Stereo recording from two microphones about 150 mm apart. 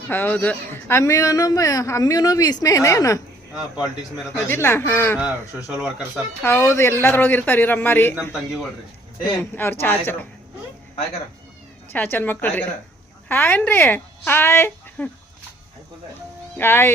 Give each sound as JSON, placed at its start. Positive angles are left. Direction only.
{"t": 0.1, "sound": "speech", "side_deg": 10}
{"t": 3.5, "sound": "speech", "side_deg": -5}
{"t": 4.4, "sound": "a man's voice", "side_deg": 15}
{"t": 5.2, "sound": "speech", "side_deg": -5}
{"t": 6.0, "sound": "a man's voice", "side_deg": 15}
{"t": 9.4, "sound": "a man's voice", "side_deg": 15}
{"t": 11.9, "sound": "a man's voice", "side_deg": 15}
{"t": 16.6, "sound": "a man's voice", "side_deg": 15}